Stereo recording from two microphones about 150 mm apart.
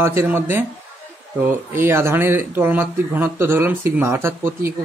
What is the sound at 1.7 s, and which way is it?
Speech, 15° right (ahead or behind).